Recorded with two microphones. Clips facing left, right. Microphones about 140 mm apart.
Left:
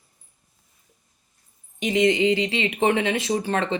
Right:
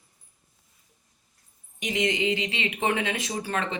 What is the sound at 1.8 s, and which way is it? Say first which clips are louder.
Speech: left 7 dB; 30° left (ahead or behind).